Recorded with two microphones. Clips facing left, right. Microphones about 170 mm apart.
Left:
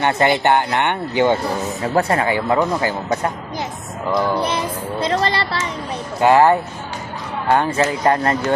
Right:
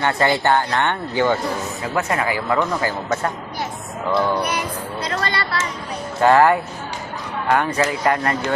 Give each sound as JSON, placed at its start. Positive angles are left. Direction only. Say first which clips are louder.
{"t": 0.0, "sound": "speech", "louder": "left 2 dB", "side_deg": 20}
{"t": 1.8, "sound": "speech", "louder": "left 5 dB", "side_deg": 35}
{"t": 4.4, "sound": "child singing", "louder": "left 2 dB", "side_deg": 25}
{"t": 6.2, "sound": "speech", "louder": "left 1 dB", "side_deg": 20}